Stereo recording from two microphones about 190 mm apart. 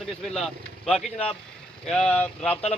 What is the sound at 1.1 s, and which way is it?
Speech, 30° left (ahead or behind).